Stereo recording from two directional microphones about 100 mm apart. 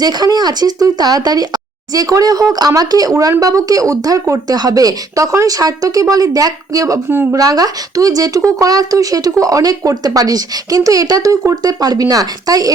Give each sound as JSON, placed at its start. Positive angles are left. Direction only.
{"t": 0.0, "sound": "speech", "side_deg": -40}